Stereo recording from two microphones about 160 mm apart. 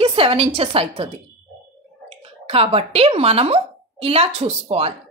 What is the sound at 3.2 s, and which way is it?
A woman's voice, 40° right (ahead or behind).